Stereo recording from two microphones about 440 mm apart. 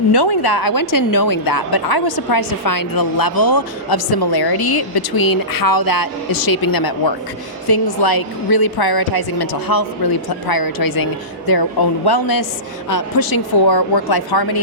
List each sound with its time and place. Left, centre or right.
0.1 s a woman's voice: left